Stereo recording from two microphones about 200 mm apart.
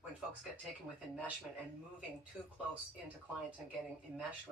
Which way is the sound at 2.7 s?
10° right (ahead or behind).